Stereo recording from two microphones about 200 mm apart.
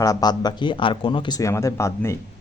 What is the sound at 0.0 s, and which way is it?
Speech, 20° left (ahead or behind).